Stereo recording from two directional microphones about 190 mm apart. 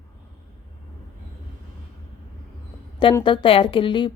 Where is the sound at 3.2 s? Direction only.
25° left (ahead or behind).